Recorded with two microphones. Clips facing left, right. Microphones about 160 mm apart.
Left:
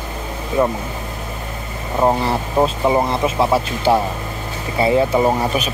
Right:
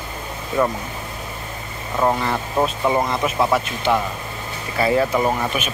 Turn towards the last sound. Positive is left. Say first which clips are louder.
# left 4 dB
turn(degrees=30)  # may be behind; listen again after turning